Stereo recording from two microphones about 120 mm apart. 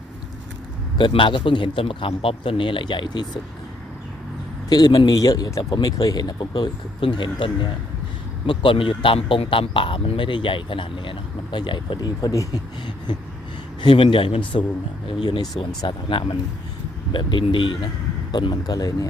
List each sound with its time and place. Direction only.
0.9 s speech: 45° left (ahead or behind)
4.7 s a man's voice: 35° left (ahead or behind)
13.8 s speech: 45° left (ahead or behind)
15.8 s a man's voice: 40° left (ahead or behind)